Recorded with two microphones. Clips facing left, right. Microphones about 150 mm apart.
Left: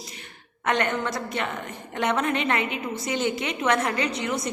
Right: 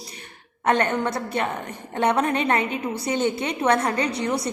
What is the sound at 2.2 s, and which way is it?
A woman's voice, 40° right (ahead or behind).